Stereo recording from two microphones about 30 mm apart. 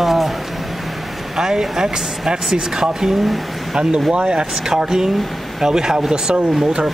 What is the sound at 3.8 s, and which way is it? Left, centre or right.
Speech, right.